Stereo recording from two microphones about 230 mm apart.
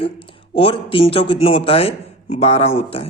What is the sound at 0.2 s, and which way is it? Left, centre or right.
Speech, left.